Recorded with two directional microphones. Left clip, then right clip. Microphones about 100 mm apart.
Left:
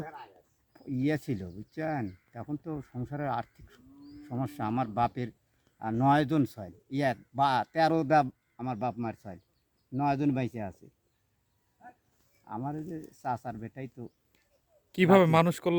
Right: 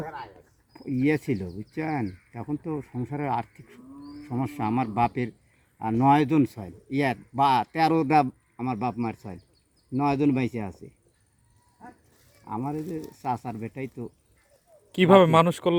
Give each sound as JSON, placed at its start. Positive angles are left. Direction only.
{"t": 0.7, "sound": "a sound", "side_deg": 10}
{"t": 0.9, "sound": "a man's voice", "side_deg": 15}
{"t": 12.5, "sound": "a man's voice", "side_deg": 20}
{"t": 14.9, "sound": "speech", "side_deg": 50}